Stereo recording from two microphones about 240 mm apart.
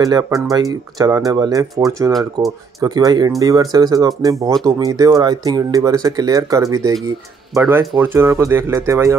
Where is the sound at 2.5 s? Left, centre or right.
Centre.